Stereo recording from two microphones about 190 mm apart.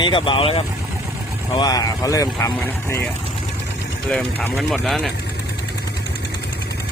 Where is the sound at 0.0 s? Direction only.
25° left (ahead or behind).